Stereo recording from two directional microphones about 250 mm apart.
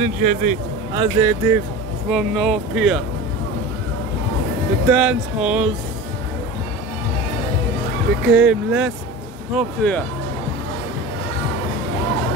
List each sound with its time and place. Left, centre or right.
0.0 s speech: right
0.9 s speech: centre
4.8 s speech: centre
8.3 s speech: centre